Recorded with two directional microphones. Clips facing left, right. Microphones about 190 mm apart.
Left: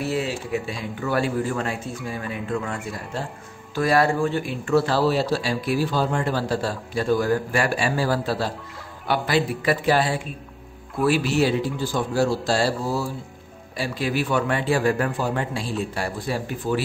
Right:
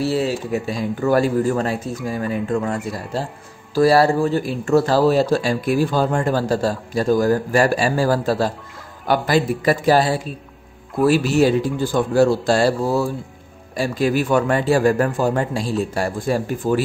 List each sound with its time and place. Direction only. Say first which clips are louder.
0.0 s a man's voice: right 5 dB; 35° right (ahead or behind)